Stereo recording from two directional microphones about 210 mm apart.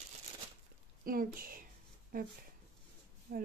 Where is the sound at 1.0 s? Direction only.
45° right (ahead or behind).